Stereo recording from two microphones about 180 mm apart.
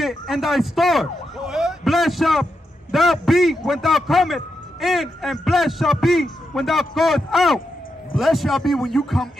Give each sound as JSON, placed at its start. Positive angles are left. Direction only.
{"t": 0.0, "sound": "a man's voice", "side_deg": 0}